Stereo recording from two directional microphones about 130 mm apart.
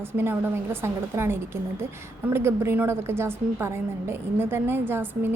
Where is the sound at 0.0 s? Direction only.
15° right (ahead or behind).